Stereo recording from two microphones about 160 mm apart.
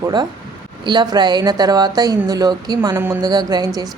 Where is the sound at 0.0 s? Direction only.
25° right (ahead or behind).